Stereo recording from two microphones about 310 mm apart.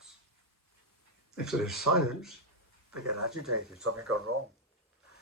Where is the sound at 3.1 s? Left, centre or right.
Right.